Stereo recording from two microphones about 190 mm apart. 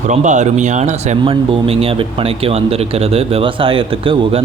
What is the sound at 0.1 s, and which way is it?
Speech, 40° right (ahead or behind).